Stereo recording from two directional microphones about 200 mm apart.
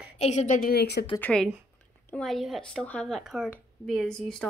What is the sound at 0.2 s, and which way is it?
Speech, 35° left (ahead or behind).